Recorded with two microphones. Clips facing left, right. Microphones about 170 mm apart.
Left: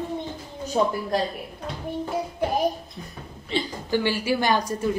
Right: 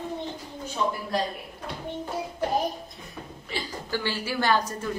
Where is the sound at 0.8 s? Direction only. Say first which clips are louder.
Left 6 dB; 50° left (ahead or behind).